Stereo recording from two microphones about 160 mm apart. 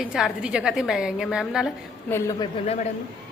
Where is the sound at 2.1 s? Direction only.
20° left (ahead or behind).